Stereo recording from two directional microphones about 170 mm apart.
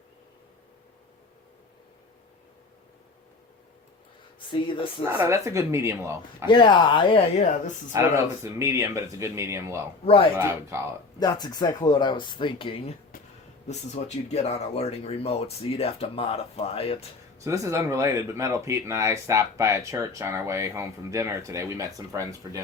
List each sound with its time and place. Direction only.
4.4 s speech: 30° left (ahead or behind)
5.0 s speech: 15° right (ahead or behind)
6.5 s speech: 25° left (ahead or behind)
7.9 s speech: 15° right (ahead or behind)
11.2 s speech: 25° left (ahead or behind)
17.4 s speech: 20° right (ahead or behind)